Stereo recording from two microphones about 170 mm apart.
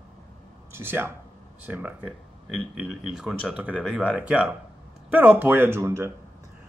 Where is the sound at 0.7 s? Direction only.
15° right (ahead or behind).